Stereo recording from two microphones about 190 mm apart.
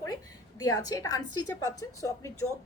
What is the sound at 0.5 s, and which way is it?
Speech, 20° left (ahead or behind).